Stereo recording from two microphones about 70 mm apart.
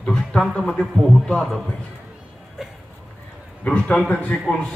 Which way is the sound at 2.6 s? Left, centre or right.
Centre.